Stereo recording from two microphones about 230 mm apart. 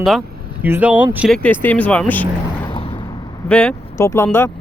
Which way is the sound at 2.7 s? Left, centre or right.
Left.